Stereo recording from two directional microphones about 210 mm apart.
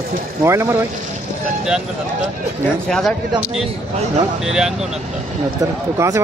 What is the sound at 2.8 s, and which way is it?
Speech, centre (ahead or behind).